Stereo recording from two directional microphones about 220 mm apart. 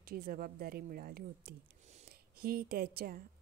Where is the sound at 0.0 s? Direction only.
40° right (ahead or behind).